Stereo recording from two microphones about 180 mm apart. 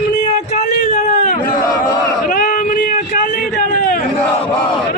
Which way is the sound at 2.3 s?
50° left (ahead or behind).